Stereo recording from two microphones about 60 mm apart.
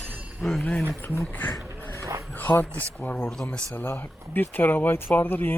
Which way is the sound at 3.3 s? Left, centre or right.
Centre.